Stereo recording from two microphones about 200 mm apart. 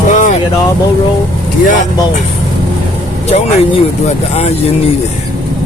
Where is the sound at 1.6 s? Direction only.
40° left (ahead or behind).